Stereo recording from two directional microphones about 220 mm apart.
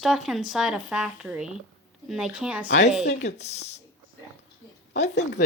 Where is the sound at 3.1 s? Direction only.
30° left (ahead or behind).